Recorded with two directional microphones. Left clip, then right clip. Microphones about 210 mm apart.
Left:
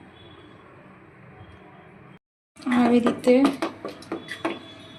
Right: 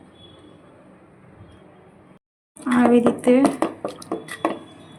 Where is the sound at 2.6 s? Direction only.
25° right (ahead or behind).